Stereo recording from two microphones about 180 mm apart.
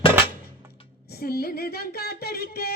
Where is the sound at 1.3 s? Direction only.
60° left (ahead or behind).